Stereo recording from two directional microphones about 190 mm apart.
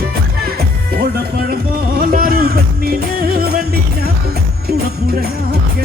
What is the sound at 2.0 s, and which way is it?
Music, 50° right (ahead or behind).